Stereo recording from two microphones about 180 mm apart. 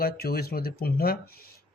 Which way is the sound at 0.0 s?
55° left (ahead or behind).